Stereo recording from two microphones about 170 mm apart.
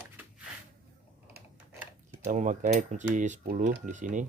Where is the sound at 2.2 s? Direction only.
45° right (ahead or behind).